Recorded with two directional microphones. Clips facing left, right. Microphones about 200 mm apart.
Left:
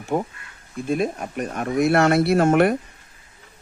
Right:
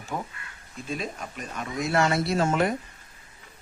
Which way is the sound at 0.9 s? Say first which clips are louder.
Left 10 dB; 55° left (ahead or behind).